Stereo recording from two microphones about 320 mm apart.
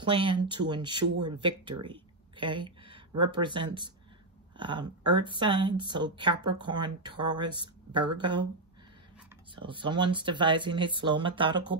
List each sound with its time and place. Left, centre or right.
0.0 s speech: centre
9.6 s speech: centre